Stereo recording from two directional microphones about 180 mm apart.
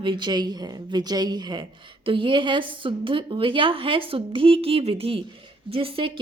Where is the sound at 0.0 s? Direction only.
25° right (ahead or behind).